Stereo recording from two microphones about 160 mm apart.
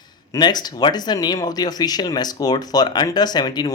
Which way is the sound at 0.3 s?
25° left (ahead or behind).